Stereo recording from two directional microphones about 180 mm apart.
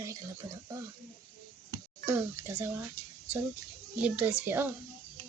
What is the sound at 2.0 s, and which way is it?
Speech, 10° right (ahead or behind).